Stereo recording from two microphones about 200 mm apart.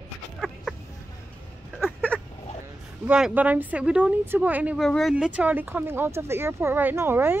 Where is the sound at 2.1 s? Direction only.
5° left (ahead or behind).